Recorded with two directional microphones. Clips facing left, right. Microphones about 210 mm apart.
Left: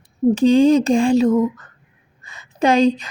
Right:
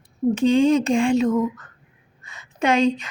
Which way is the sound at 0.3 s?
35° left (ahead or behind).